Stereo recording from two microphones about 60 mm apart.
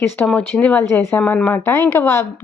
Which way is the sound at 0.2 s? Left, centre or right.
Left.